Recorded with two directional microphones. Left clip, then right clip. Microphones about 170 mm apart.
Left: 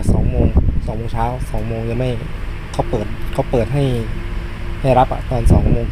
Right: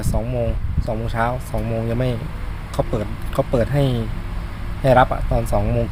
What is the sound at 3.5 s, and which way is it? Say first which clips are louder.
Speech: left 3 dB; 5° right (ahead or behind).